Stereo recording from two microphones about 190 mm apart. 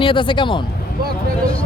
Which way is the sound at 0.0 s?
25° left (ahead or behind).